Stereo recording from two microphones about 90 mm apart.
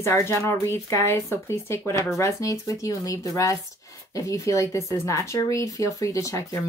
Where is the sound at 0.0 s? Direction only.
30° left (ahead or behind).